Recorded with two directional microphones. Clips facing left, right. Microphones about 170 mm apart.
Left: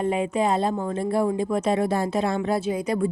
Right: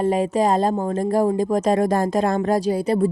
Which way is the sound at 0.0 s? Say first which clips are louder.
Right 4 dB; 35° right (ahead or behind).